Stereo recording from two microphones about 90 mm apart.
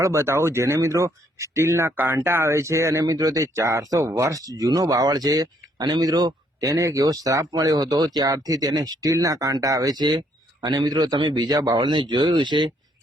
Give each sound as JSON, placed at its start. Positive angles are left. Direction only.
{"t": 0.0, "sound": "speech", "side_deg": -35}